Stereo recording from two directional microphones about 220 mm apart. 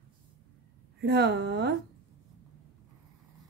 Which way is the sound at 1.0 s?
50° right (ahead or behind).